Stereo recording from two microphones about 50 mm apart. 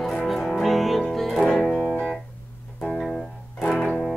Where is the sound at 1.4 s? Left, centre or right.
Centre.